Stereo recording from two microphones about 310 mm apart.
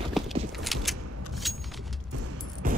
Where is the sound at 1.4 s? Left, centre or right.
Centre.